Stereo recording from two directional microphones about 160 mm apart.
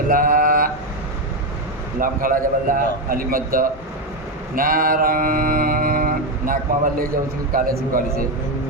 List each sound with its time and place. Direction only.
0.1 s mantra: 60° right (ahead or behind)
2.0 s mantra: 60° right (ahead or behind)